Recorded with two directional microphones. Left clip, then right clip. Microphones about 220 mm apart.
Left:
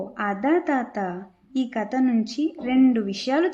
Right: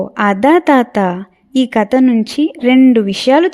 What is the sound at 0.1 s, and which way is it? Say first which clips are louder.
A woman's voice: right 12 dB; 45° right (ahead or behind).